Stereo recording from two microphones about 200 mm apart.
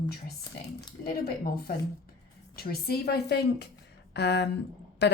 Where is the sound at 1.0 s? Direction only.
50° left (ahead or behind).